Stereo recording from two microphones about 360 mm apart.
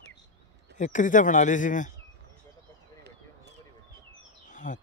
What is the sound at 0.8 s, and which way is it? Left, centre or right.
Speech, left.